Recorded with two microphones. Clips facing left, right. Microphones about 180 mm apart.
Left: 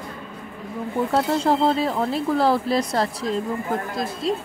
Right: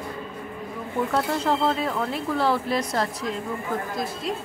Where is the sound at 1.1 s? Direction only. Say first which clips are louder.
Left 4 dB; 30° left (ahead or behind).